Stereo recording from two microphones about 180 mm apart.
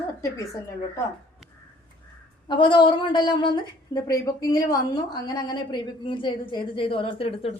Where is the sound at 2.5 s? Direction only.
25° left (ahead or behind).